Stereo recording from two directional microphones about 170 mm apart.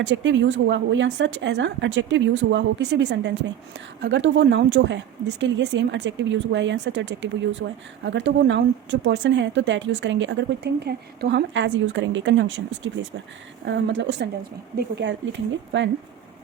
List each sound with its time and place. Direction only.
0.0 s a woman's voice: 90° right